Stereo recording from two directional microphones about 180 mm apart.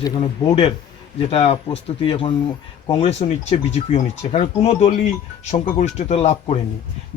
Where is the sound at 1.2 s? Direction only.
35° left (ahead or behind).